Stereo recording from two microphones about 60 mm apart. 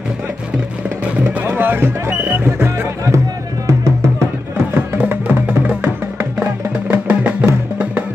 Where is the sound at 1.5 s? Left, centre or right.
Right.